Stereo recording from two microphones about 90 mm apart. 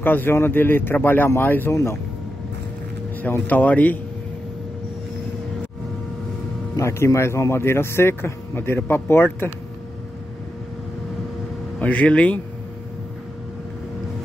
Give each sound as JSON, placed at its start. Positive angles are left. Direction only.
{"t": 0.0, "sound": "a man's voice", "side_deg": 25}
{"t": 3.2, "sound": "a man's voice", "side_deg": 20}
{"t": 6.8, "sound": "a man's voice", "side_deg": 30}
{"t": 11.8, "sound": "speech", "side_deg": 15}